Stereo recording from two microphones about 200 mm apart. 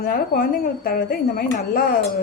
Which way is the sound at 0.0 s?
45° left (ahead or behind).